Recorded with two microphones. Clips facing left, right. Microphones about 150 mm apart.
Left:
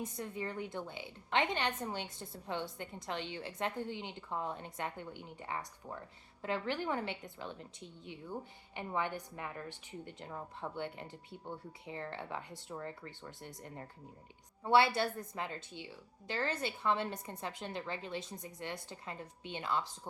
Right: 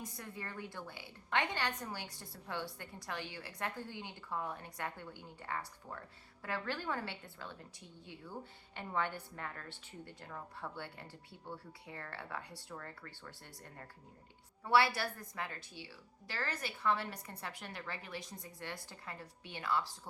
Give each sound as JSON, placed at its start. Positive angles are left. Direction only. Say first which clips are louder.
{"t": 0.0, "sound": "a woman's voice", "louder": "left 6 dB", "side_deg": 20}